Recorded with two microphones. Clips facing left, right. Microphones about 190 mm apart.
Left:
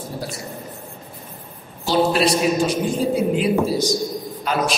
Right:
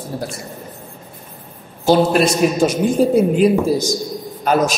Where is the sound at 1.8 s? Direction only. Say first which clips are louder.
Right 4 dB; 50° right (ahead or behind).